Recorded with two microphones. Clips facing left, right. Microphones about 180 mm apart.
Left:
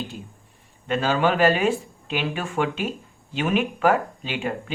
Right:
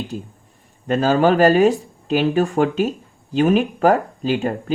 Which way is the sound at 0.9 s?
40° right (ahead or behind).